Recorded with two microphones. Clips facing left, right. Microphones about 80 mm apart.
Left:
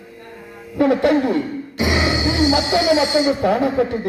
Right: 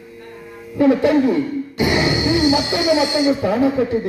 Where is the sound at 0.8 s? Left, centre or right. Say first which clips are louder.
Right 2 dB; left.